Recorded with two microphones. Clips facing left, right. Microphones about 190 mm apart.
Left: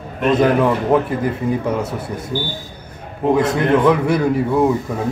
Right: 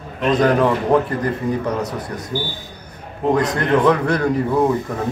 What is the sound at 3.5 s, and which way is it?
A man's voice, 5° left (ahead or behind).